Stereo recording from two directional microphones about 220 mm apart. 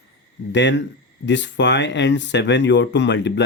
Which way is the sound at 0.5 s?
55° left (ahead or behind).